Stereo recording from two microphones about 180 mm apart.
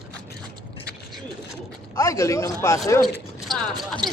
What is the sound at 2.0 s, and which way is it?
Speech, 15° left (ahead or behind).